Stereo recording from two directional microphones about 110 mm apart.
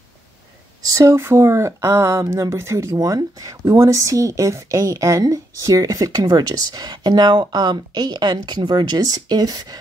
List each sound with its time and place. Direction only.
0.8 s speech: 25° right (ahead or behind)